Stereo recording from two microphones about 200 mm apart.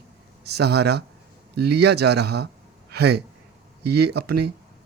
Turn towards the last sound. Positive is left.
turn(degrees=-55)  # may be behind; listen again after turning